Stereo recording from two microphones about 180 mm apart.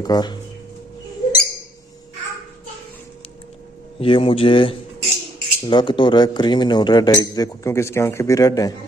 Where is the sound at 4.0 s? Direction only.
30° left (ahead or behind).